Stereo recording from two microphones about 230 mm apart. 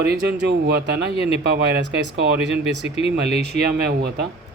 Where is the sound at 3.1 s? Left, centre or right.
Right.